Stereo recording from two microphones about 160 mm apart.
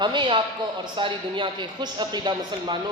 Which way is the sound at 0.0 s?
30° right (ahead or behind).